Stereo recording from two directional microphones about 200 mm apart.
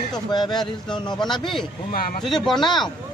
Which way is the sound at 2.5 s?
20° left (ahead or behind).